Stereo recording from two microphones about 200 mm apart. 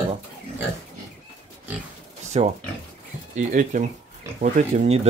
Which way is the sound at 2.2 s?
35° right (ahead or behind).